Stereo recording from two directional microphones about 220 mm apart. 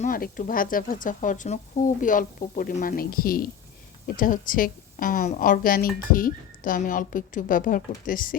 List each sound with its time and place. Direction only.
0.0 s speech: 40° left (ahead or behind)